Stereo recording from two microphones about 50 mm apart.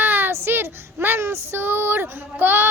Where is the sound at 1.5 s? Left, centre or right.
Right.